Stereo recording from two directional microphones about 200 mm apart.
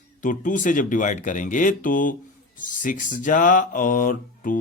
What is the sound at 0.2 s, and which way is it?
Speech, 40° left (ahead or behind).